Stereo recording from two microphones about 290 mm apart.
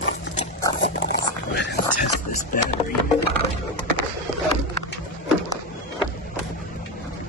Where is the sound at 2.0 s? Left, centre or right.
Left.